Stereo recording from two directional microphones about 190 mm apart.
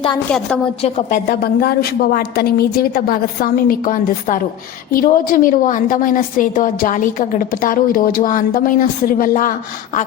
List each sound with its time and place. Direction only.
0.3 s a woman's voice: 5° left (ahead or behind)
0.8 s a woman's voice: 30° left (ahead or behind)
1.3 s a woman's voice: 55° left (ahead or behind)